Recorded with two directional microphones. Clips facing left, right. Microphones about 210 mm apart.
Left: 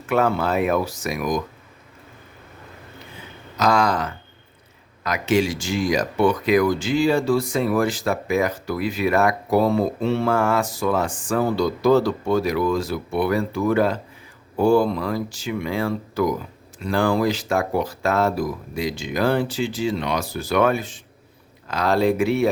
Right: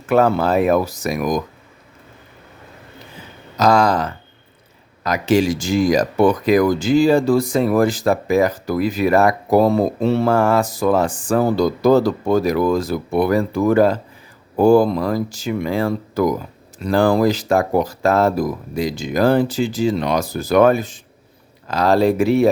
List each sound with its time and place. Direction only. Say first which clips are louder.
0.1 s speech: right 5 dB; 40° right (ahead or behind)
3.6 s speech: right 4 dB; 35° right (ahead or behind)